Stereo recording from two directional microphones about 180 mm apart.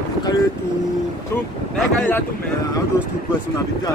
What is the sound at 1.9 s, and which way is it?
Speech, 10° left (ahead or behind).